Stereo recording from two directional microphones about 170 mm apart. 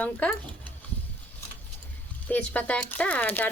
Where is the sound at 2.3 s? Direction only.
10° left (ahead or behind).